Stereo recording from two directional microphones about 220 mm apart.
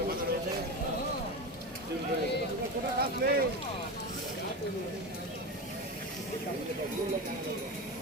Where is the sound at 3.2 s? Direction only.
40° right (ahead or behind).